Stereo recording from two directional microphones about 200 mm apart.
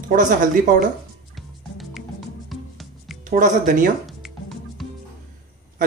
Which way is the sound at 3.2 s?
40° right (ahead or behind).